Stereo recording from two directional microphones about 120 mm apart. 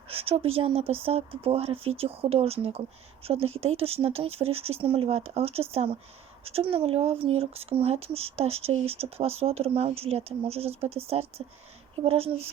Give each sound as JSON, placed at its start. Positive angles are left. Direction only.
{"t": 0.1, "sound": "speech", "side_deg": -55}